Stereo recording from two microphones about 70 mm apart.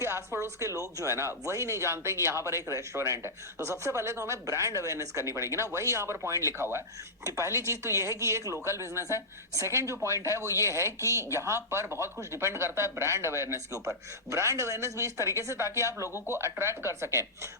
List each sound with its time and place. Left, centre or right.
0.0 s speech: right